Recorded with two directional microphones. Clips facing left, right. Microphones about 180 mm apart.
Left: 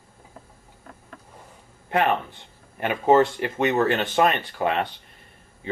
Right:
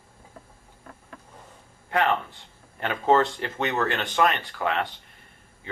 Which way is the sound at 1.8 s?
20° left (ahead or behind).